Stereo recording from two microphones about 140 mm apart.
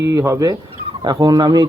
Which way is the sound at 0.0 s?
20° right (ahead or behind).